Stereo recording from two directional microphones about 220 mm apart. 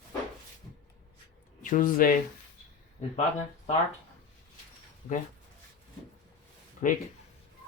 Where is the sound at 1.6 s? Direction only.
35° left (ahead or behind).